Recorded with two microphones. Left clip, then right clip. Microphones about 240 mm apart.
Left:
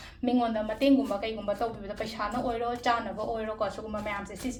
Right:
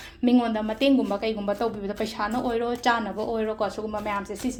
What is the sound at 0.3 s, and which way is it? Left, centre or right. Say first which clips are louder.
A woman's voice: right 4 dB; right.